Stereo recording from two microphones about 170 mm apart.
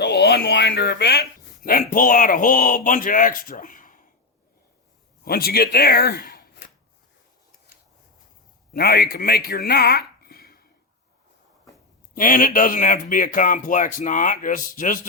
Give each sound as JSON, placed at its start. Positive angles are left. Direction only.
{"t": 0.0, "sound": "a man's voice", "side_deg": 90}
{"t": 5.2, "sound": "speech", "side_deg": 60}
{"t": 8.7, "sound": "speech", "side_deg": 65}
{"t": 12.1, "sound": "a man's voice", "side_deg": 55}